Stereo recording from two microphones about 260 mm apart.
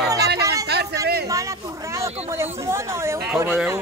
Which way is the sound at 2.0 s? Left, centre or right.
Centre.